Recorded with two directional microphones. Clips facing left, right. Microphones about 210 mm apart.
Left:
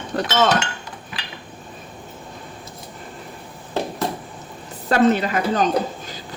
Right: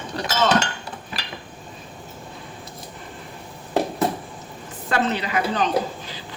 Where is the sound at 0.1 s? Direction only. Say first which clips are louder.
Left 6 dB; 55° left (ahead or behind).